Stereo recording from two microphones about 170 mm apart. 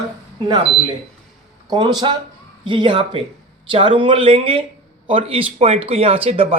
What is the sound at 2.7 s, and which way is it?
Speech, 30° right (ahead or behind).